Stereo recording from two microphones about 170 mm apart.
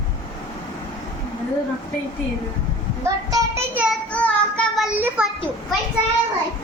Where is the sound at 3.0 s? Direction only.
20° right (ahead or behind).